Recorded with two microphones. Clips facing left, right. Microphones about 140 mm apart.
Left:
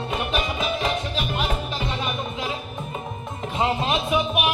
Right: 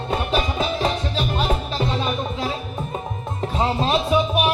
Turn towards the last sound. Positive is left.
turn(degrees=-30)  # may be behind; listen again after turning